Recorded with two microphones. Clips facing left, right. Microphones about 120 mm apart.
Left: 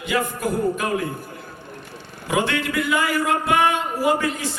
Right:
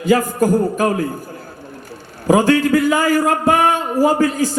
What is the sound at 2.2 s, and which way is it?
A man's voice, 40° right (ahead or behind).